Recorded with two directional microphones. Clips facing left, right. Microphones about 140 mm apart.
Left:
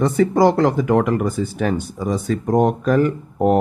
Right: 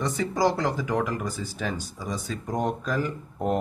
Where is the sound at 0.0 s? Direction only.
60° left (ahead or behind).